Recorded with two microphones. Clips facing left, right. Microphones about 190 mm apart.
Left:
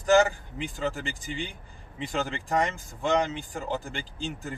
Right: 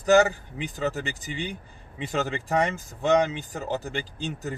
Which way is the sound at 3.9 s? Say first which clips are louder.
Right 3 dB; 20° right (ahead or behind).